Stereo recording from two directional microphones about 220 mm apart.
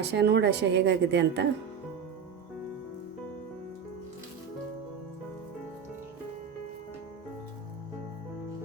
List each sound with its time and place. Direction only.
0.0 s a woman's voice: 50° right (ahead or behind)